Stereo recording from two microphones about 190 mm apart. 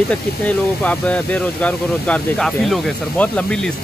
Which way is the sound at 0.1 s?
5° left (ahead or behind).